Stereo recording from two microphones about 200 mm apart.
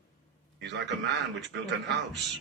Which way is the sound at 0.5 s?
60° right (ahead or behind).